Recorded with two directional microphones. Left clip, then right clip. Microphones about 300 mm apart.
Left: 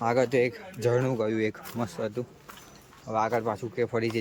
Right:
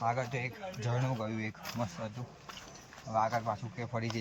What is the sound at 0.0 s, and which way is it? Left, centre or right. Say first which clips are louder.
Speech: left 10 dB; centre.